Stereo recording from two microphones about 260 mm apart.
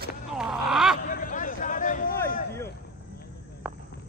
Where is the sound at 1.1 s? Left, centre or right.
Left.